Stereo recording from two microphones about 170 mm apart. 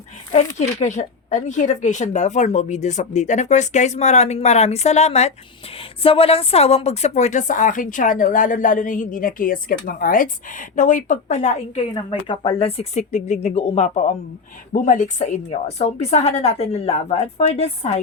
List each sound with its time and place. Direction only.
0.3 s a woman's voice: 45° left (ahead or behind)
12.3 s a woman's voice: 30° left (ahead or behind)